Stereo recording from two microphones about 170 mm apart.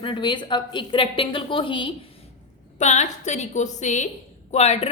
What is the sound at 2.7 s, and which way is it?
A woman's voice, 45° left (ahead or behind).